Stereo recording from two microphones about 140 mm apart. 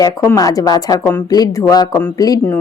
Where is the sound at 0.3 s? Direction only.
25° left (ahead or behind).